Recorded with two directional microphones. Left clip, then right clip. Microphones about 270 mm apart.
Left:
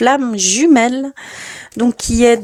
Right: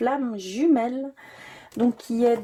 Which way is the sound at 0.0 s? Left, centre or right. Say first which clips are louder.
Left 12 dB; left.